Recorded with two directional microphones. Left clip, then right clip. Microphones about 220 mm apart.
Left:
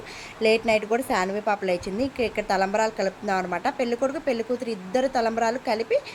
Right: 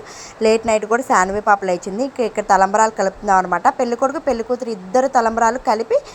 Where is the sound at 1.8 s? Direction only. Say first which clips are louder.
Right 6 dB; 15° right (ahead or behind).